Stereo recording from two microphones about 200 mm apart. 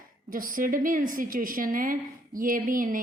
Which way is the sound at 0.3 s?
45° right (ahead or behind).